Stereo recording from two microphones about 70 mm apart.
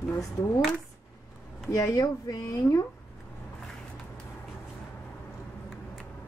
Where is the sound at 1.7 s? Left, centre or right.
Left.